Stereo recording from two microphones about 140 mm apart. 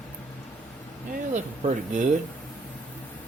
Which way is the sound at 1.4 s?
60° right (ahead or behind).